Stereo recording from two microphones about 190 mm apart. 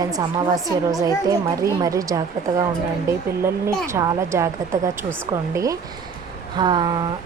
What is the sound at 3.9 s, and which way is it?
Speech, 15° right (ahead or behind).